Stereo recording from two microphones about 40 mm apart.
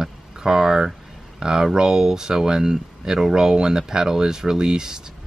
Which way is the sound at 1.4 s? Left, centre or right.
Centre.